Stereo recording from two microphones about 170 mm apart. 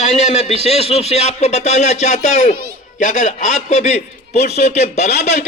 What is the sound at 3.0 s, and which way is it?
Speech, 45° left (ahead or behind).